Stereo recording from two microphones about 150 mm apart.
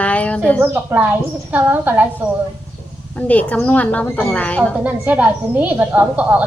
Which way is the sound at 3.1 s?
10° left (ahead or behind).